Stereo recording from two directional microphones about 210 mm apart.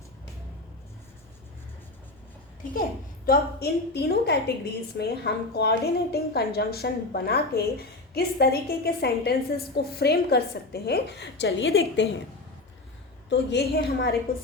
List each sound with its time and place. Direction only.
3.2 s a woman's voice: 50° left (ahead or behind)
13.3 s a woman's voice: 55° left (ahead or behind)